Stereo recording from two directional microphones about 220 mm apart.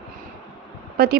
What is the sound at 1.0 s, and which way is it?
Speech, 45° right (ahead or behind).